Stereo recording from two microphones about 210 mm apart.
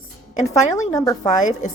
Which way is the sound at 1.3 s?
35° left (ahead or behind).